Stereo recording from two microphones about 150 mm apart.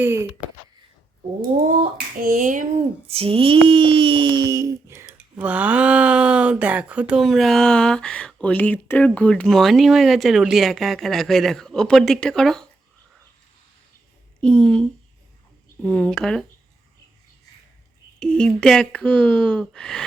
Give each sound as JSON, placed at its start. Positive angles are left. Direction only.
{"t": 0.0, "sound": "speech", "side_deg": -15}
{"t": 2.2, "sound": "speech", "side_deg": -65}
{"t": 3.1, "sound": "speech", "side_deg": -40}
{"t": 5.1, "sound": "speech", "side_deg": -10}
{"t": 14.4, "sound": "speech", "side_deg": 5}
{"t": 18.2, "sound": "speech", "side_deg": 5}